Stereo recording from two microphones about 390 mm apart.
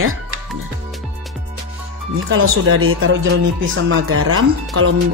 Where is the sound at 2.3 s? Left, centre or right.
Right.